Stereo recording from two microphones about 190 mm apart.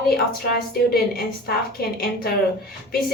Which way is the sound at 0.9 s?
55° left (ahead or behind).